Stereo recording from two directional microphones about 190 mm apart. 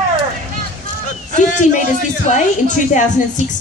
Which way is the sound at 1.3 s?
40° left (ahead or behind).